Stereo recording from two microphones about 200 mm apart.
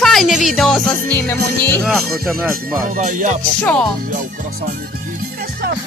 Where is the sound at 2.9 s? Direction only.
40° right (ahead or behind).